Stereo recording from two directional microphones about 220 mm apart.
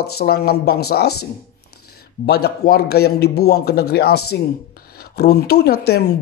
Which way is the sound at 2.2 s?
45° left (ahead or behind).